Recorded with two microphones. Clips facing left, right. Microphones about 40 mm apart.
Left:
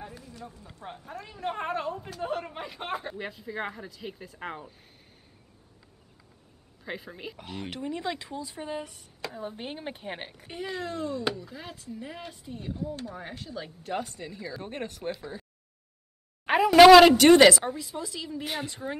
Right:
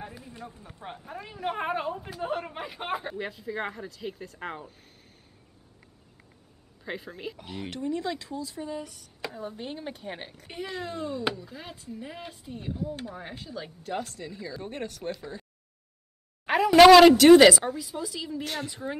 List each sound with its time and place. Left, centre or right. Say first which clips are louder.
0.2 s a sound: right 1 dB; right
0.8 s a woman's voice: right 1 dB; right; by 4.7 s centre
6.8 s speech: right 2 dB; centre
7.7 s speech: right 3 dB; centre
10.5 s speech: left 1 dB; centre
16.4 s a sound: even; centre
17.1 s speech: right 2 dB; centre
18.4 s speech: left 1 dB; centre
18.7 s speech: even; centre